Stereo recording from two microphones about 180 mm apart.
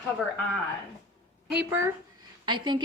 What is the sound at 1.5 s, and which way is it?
Speech, 10° right (ahead or behind).